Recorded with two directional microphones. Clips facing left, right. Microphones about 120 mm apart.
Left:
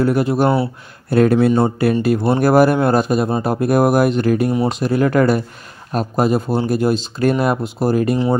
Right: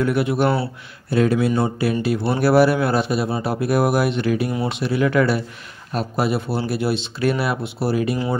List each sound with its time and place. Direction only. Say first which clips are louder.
0.0 s speech: left 3 dB; 40° left (ahead or behind)
1.1 s speech: left 5 dB; 50° left (ahead or behind)